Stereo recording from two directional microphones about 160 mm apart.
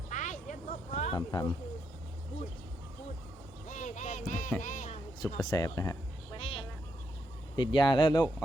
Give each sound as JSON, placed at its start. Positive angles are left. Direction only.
{"t": 0.1, "sound": "a sound", "side_deg": 50}
{"t": 1.1, "sound": "speech", "side_deg": 25}
{"t": 3.7, "sound": "heart sounds", "side_deg": 50}
{"t": 5.4, "sound": "speech", "side_deg": 25}
{"t": 6.3, "sound": "a sound", "side_deg": 35}
{"t": 7.5, "sound": "speech", "side_deg": 30}